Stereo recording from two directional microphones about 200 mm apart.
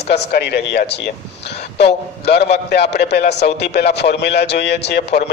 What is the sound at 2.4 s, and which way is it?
A man's voice, 55° left (ahead or behind).